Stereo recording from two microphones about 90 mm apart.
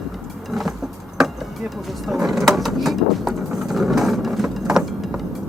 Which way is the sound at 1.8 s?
5° right (ahead or behind).